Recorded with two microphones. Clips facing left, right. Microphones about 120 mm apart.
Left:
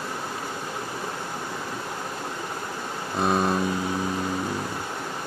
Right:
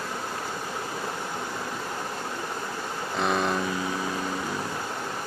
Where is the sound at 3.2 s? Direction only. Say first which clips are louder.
Left 3 dB; 35° left (ahead or behind).